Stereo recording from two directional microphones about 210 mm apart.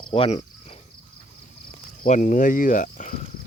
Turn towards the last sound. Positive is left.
turn(degrees=40)  # may be behind; listen again after turning